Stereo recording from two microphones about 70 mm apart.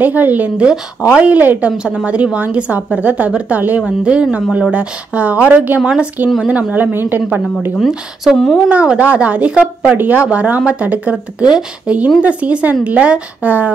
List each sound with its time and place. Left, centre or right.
0.0 s a woman's voice: right
7.9 s a woman's voice: centre